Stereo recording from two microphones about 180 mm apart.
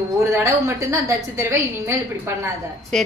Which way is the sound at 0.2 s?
15° right (ahead or behind).